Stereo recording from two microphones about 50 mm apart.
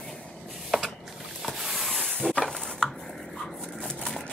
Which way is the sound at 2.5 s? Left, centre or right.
Centre.